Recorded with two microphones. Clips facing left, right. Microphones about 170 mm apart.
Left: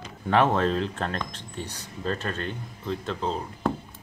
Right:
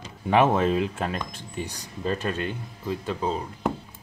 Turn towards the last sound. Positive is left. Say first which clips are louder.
# right 1 dB
turn(degrees=-10)  # may be behind; listen again after turning